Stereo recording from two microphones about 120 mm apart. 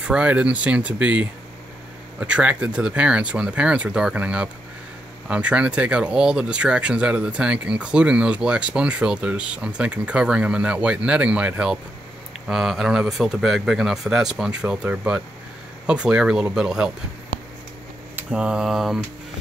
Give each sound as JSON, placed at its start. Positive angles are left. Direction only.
{"t": 0.0, "sound": "speech", "side_deg": -10}
{"t": 18.1, "sound": "speech", "side_deg": -5}